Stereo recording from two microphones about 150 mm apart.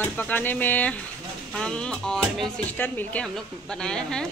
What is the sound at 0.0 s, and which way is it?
Speech, 10° left (ahead or behind).